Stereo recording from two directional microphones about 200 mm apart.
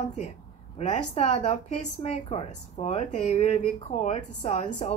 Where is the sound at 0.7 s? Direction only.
30° left (ahead or behind).